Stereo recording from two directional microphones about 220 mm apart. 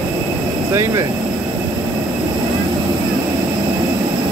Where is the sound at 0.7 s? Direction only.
15° right (ahead or behind).